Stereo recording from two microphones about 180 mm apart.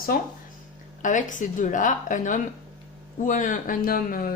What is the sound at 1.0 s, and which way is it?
A woman's voice, 45° left (ahead or behind).